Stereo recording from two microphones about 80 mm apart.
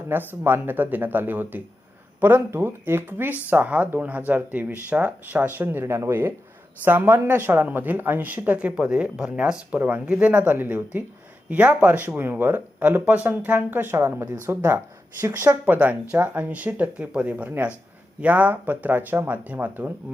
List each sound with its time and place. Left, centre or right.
0.1 s speech: right
15.6 s speech: right